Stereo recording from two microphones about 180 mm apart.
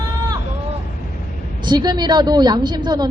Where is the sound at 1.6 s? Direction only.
25° right (ahead or behind).